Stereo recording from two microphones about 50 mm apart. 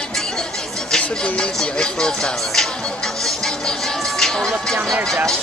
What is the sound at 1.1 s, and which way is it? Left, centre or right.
Speech, centre.